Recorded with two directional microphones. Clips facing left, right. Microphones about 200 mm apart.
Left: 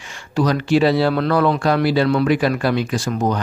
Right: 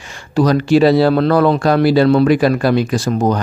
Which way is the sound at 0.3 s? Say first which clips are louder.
Right 5 dB; 35° right (ahead or behind).